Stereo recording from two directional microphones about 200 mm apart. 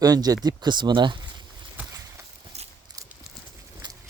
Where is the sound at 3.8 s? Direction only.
20° right (ahead or behind).